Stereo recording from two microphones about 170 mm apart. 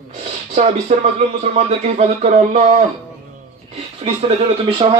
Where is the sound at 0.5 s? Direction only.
45° right (ahead or behind).